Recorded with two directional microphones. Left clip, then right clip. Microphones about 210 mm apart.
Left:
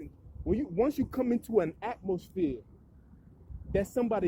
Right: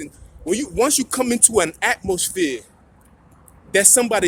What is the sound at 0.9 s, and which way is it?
Speech, 15° right (ahead or behind).